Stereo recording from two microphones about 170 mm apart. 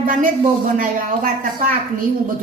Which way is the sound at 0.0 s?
55° right (ahead or behind).